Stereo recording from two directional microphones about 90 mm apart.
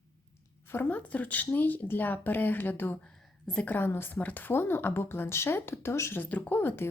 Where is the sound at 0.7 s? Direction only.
20° left (ahead or behind).